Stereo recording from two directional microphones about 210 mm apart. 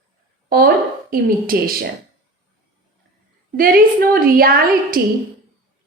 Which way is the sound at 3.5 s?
45° right (ahead or behind).